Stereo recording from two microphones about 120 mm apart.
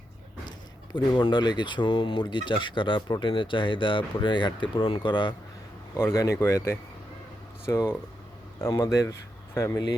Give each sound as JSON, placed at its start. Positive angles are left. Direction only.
{"t": 0.9, "sound": "speech", "side_deg": 40}
{"t": 6.0, "sound": "speech", "side_deg": 25}